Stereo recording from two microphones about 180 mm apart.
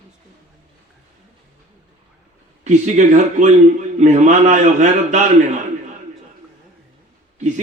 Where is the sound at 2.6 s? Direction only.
40° right (ahead or behind).